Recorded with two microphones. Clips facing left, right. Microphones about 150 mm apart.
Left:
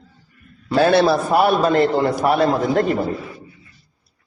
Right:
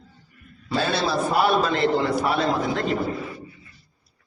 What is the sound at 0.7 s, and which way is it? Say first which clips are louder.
A man's voice: left 9 dB; 65° left (ahead or behind).